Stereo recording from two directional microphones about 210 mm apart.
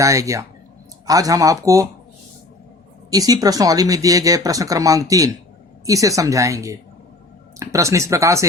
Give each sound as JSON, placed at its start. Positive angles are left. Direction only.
{"t": 0.0, "sound": "speech", "side_deg": -15}
{"t": 3.1, "sound": "speech", "side_deg": -15}